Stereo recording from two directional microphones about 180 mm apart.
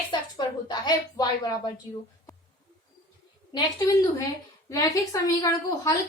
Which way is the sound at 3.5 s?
20° left (ahead or behind).